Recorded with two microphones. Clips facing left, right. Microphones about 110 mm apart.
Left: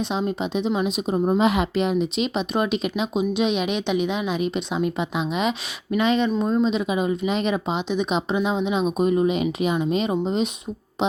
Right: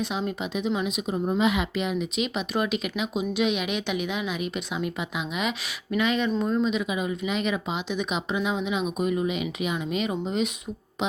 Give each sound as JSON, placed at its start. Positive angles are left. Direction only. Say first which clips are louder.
{"t": 0.0, "sound": "a woman's voice", "louder": "left 4 dB", "side_deg": 25}